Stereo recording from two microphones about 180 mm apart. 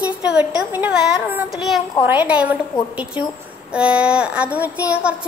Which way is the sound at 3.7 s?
5° right (ahead or behind).